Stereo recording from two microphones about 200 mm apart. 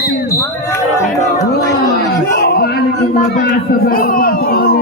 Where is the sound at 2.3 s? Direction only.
50° left (ahead or behind).